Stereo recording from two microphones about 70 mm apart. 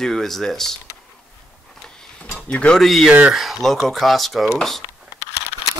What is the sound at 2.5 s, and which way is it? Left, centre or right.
Speech, centre.